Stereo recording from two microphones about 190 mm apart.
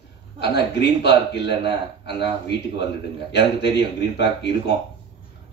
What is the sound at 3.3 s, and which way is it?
A man's voice, 60° left (ahead or behind).